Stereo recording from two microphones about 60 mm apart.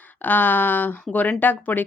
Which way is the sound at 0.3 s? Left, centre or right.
Left.